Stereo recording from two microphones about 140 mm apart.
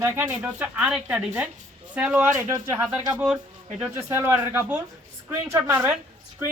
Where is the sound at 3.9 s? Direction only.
15° right (ahead or behind).